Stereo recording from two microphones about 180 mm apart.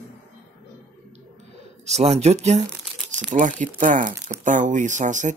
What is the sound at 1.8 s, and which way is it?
Speech, 35° right (ahead or behind).